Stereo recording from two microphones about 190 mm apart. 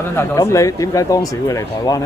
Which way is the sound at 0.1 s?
15° left (ahead or behind).